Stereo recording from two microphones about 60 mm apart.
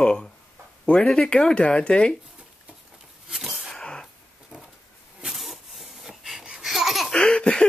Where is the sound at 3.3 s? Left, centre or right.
Centre.